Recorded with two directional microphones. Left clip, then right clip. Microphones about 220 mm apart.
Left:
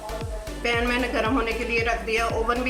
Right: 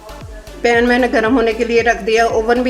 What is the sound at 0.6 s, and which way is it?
Speech, 40° right (ahead or behind).